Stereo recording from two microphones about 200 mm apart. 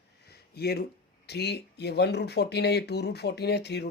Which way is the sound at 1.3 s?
55° left (ahead or behind).